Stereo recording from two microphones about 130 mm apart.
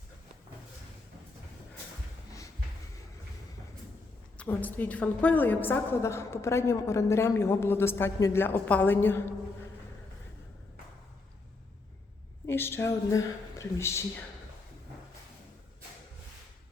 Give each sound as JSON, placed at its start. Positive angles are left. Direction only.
{"t": 4.4, "sound": "a woman's voice", "side_deg": 15}
{"t": 12.5, "sound": "a woman's voice", "side_deg": 20}